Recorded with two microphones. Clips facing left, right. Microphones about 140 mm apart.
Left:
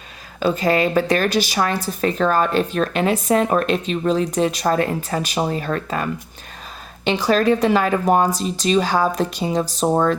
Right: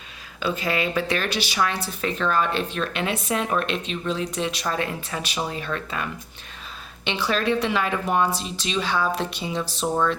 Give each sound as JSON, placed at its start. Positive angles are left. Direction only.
{"t": 0.3, "sound": "a woman's voice", "side_deg": 40}